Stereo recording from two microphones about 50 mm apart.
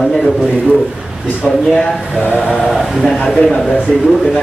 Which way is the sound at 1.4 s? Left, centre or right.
Centre.